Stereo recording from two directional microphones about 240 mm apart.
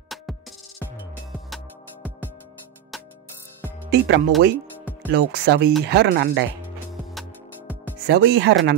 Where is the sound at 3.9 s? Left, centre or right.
Right.